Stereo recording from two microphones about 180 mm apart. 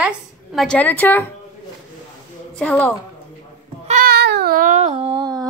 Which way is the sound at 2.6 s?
5° left (ahead or behind).